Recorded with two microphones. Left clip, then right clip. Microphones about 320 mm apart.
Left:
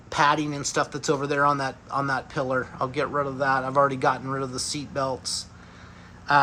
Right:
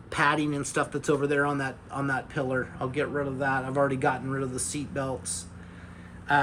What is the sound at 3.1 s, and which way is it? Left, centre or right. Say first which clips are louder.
Speech: left 4 dB; left.